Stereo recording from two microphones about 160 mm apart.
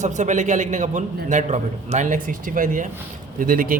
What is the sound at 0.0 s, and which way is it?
A man's voice, 50° right (ahead or behind).